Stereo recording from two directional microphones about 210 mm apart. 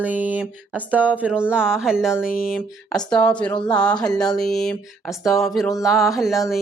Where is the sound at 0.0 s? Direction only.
5° right (ahead or behind).